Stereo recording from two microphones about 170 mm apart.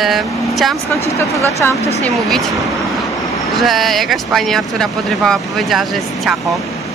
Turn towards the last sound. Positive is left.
turn(degrees=0)  # may be behind; listen again after turning